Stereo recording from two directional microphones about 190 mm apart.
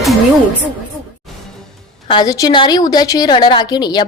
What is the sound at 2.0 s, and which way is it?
A woman's voice, 25° left (ahead or behind).